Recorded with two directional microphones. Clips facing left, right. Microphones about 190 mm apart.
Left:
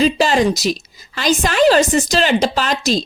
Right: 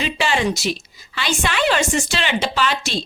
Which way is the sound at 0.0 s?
40° left (ahead or behind).